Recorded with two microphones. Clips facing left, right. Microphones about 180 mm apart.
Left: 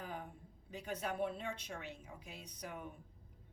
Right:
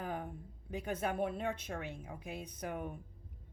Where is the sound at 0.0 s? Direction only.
50° right (ahead or behind).